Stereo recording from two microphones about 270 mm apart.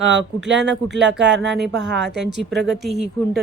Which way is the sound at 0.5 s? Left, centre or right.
Right.